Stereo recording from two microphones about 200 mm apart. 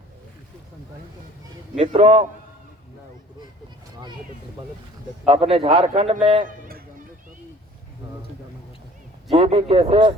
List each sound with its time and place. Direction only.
1.7 s a man's voice: 35° right (ahead or behind)
5.2 s a man's voice: 30° right (ahead or behind)
9.3 s a man's voice: 30° right (ahead or behind)